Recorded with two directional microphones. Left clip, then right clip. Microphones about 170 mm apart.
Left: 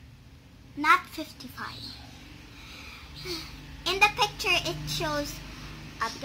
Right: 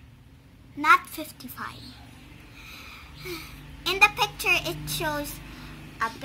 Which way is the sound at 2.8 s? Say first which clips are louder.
Left 1 dB; 10° right (ahead or behind).